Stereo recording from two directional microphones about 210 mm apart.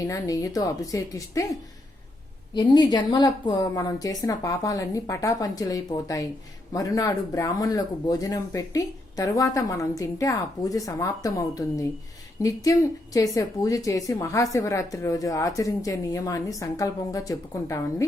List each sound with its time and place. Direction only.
0.1 s speech: 15° left (ahead or behind)
2.6 s speech: 20° left (ahead or behind)
13.1 s speech: 15° left (ahead or behind)